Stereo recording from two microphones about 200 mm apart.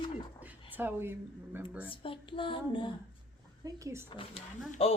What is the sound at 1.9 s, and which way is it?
Speech, 25° left (ahead or behind).